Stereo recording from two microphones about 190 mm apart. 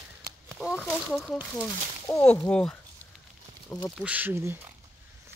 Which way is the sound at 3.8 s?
5° right (ahead or behind).